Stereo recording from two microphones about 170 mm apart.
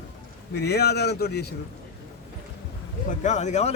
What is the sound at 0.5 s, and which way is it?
Speech, 70° left (ahead or behind).